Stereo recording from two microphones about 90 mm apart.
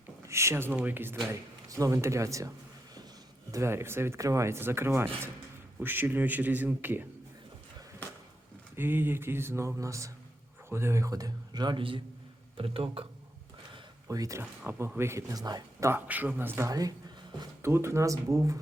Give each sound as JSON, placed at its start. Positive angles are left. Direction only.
{"t": 0.3, "sound": "speech", "side_deg": -30}
{"t": 1.3, "sound": "speech", "side_deg": -35}
{"t": 3.5, "sound": "speech", "side_deg": -30}
{"t": 8.7, "sound": "speech", "side_deg": -25}
{"t": 11.8, "sound": "a man's voice", "side_deg": -75}
{"t": 12.5, "sound": "speech", "side_deg": -85}
{"t": 14.1, "sound": "speech", "side_deg": -40}
{"t": 14.9, "sound": "speech", "side_deg": -30}
{"t": 15.3, "sound": "speech", "side_deg": -45}
{"t": 15.9, "sound": "speech", "side_deg": -20}
{"t": 16.6, "sound": "speech", "side_deg": -40}
{"t": 17.6, "sound": "speech", "side_deg": -30}